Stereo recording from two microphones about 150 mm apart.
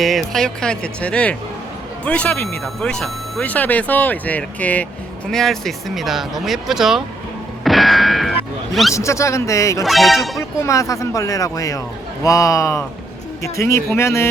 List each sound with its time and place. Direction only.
0.0 s speech: centre (ahead or behind)
7.6 s music: centre (ahead or behind)
8.7 s speech: centre (ahead or behind)
9.0 s speech: 20° left (ahead or behind)
9.8 s speech: centre (ahead or behind)
10.6 s speech: 20° left (ahead or behind)